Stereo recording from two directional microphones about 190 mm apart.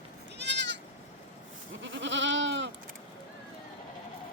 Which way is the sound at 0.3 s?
65° right (ahead or behind).